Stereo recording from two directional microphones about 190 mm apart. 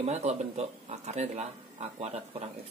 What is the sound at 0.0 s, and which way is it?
Speech, 35° right (ahead or behind).